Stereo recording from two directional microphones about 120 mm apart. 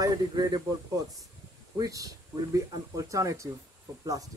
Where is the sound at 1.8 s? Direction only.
30° right (ahead or behind).